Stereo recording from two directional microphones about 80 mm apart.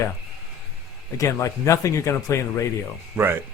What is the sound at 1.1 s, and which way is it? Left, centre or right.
Speech, left.